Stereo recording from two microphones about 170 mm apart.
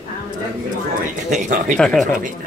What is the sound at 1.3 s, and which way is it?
Speech, 45° right (ahead or behind).